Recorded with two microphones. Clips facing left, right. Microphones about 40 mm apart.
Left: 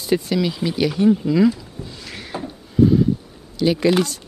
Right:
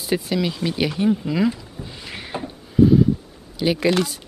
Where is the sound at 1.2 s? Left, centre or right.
Centre.